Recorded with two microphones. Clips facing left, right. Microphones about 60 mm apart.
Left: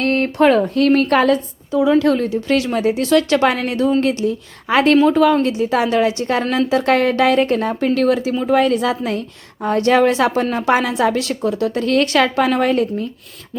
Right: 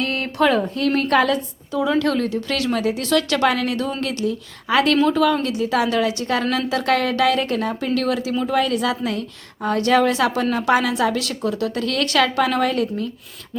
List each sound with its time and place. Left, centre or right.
0.0 s a sound: left
0.3 s speech: left
0.7 s a woman's voice: left
1.7 s a woman's voice: centre